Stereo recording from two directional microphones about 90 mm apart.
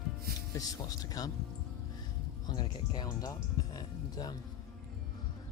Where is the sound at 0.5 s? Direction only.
45° left (ahead or behind).